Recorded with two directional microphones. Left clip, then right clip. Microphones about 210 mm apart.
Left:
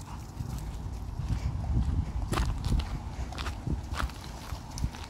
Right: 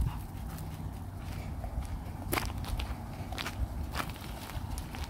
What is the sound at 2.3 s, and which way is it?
Biting, 15° right (ahead or behind).